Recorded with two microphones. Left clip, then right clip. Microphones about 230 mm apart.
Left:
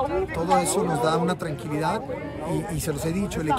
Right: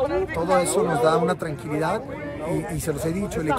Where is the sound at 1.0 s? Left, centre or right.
Centre.